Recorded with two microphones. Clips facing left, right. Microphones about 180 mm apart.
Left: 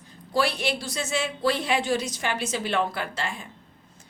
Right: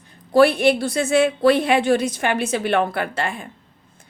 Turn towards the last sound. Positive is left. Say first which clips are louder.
# right 7 dB
turn(degrees=-55)  # may be behind; listen again after turning